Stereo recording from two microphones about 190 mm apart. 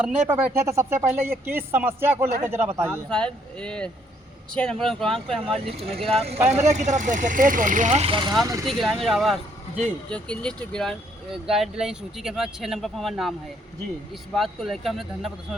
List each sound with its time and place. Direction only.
0.0 s speech: 10° right (ahead or behind)
2.9 s speech: 5° left (ahead or behind)
5.5 s speech: 30° right (ahead or behind)
8.6 s speech: centre (ahead or behind)
14.3 s speech: centre (ahead or behind)